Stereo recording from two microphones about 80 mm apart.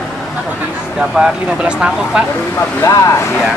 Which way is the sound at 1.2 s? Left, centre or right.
Centre.